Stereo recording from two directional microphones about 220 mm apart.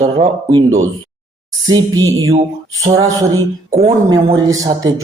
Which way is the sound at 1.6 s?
15° right (ahead or behind).